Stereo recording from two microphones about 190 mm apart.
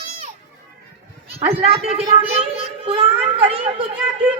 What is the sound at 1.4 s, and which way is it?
A child's voice, 30° right (ahead or behind).